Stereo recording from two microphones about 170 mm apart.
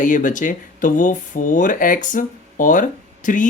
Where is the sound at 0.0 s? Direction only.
50° left (ahead or behind).